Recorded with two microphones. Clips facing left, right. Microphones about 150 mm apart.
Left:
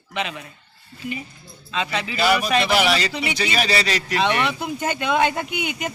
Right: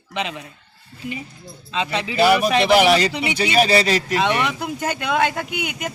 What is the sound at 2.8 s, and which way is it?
A man's voice, 50° right (ahead or behind).